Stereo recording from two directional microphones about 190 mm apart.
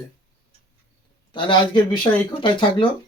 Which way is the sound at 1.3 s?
25° left (ahead or behind).